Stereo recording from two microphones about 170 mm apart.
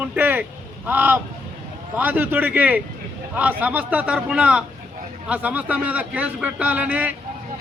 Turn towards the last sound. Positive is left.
turn(degrees=-10)  # may be behind; listen again after turning